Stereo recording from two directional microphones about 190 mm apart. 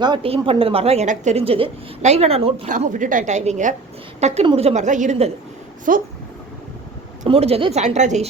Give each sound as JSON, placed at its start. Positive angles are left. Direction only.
{"t": 0.0, "sound": "a woman's voice", "side_deg": -25}
{"t": 2.7, "sound": "a woman's voice", "side_deg": -40}
{"t": 5.9, "sound": "speech", "side_deg": -45}
{"t": 7.3, "sound": "a woman's voice", "side_deg": -30}